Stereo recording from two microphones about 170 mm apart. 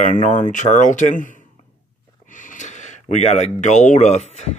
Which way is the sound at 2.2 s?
50° left (ahead or behind).